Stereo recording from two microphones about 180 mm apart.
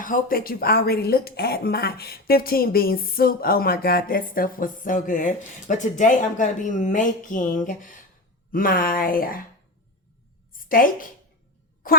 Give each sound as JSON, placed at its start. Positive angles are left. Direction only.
{"t": 0.0, "sound": "speech", "side_deg": 50}
{"t": 10.7, "sound": "speech", "side_deg": 50}